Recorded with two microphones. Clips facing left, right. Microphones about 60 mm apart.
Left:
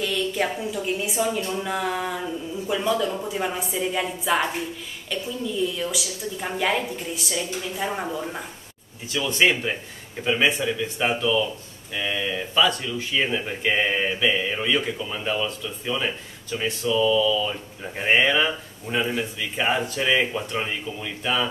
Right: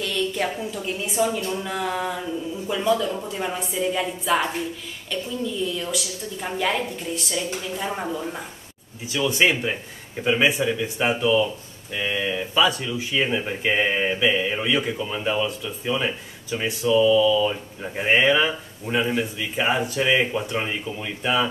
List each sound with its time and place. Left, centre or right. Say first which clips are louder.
0.0 s a woman's voice: even; centre